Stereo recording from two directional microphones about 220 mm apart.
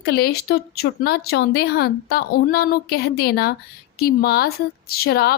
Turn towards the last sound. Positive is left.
turn(degrees=45)  # may be behind; listen again after turning